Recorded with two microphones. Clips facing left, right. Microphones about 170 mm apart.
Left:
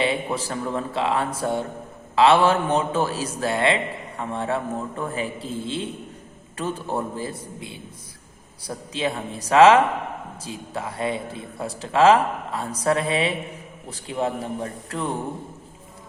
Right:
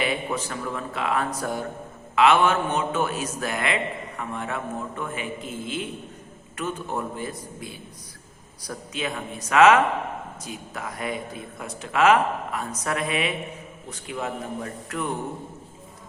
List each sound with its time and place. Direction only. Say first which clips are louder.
0.0 s a man's voice: left 3 dB; 25° left (ahead or behind)